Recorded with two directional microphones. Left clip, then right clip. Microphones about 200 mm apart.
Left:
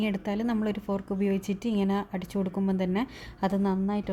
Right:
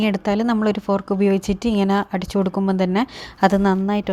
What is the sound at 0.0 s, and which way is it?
Speech, 25° right (ahead or behind).